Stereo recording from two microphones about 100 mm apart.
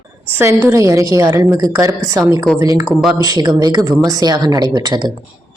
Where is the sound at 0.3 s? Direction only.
30° right (ahead or behind).